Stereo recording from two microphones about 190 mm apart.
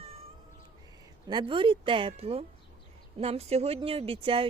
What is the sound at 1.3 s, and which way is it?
Speech, 25° right (ahead or behind).